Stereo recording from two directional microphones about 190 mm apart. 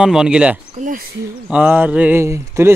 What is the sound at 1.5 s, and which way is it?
Speech, 5° right (ahead or behind).